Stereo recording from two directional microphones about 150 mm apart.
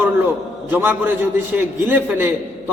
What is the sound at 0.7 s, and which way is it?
A man's voice, 10° right (ahead or behind).